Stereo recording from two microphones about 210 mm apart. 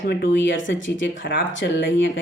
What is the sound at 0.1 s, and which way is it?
Speech, 55° left (ahead or behind).